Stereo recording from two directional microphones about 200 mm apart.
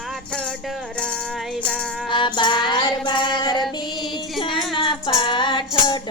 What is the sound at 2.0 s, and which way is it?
Music, 25° left (ahead or behind).